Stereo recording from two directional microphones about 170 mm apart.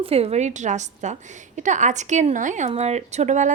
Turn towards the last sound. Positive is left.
turn(degrees=-45)  # may be behind; listen again after turning